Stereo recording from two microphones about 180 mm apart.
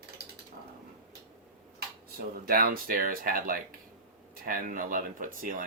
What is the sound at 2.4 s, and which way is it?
Speech, 55° right (ahead or behind).